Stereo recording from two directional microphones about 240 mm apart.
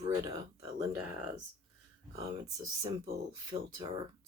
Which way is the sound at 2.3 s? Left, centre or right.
Centre.